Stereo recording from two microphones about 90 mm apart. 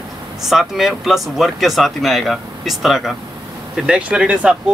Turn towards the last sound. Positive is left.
turn(degrees=-10)  # may be behind; listen again after turning